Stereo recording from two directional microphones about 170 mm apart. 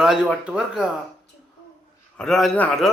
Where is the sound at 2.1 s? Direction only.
5° left (ahead or behind).